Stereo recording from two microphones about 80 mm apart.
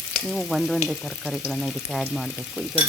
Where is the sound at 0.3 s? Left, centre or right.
Centre.